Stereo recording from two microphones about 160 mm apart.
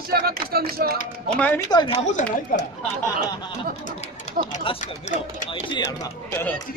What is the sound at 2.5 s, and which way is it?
Speech, 60° left (ahead or behind).